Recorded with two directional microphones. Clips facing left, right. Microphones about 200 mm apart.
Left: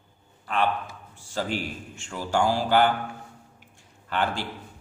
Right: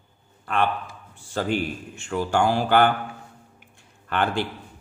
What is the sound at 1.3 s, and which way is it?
A man's voice, 55° right (ahead or behind).